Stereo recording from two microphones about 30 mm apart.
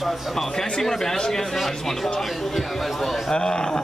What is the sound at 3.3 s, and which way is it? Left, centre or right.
Speech, left.